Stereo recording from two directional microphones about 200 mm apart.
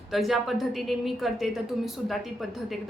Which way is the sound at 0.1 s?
Centre (ahead or behind).